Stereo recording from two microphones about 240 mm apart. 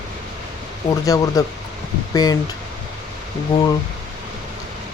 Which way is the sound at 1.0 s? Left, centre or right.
Centre.